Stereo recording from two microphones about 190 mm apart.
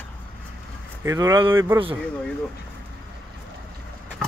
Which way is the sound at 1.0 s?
15° right (ahead or behind).